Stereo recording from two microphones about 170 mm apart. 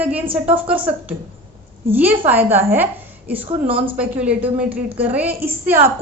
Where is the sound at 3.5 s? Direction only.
30° right (ahead or behind).